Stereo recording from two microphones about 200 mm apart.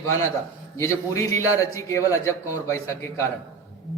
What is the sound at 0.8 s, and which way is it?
A man's voice, 15° left (ahead or behind).